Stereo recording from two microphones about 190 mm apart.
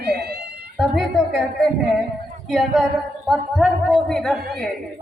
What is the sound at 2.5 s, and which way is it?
A woman's voice, centre (ahead or behind).